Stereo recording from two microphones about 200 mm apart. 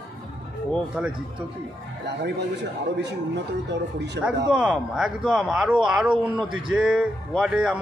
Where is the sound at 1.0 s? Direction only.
5° right (ahead or behind).